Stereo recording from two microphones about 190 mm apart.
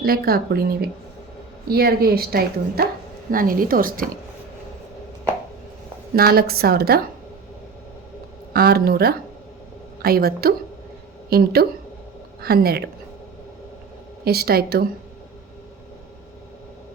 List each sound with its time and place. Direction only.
0.0 s a woman's voice: 50° right (ahead or behind)
6.1 s a woman's voice: 55° right (ahead or behind)
8.5 s a woman's voice: 55° right (ahead or behind)
14.3 s a woman's voice: 55° right (ahead or behind)